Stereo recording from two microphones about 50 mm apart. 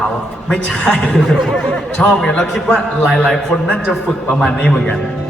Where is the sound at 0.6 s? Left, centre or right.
Centre.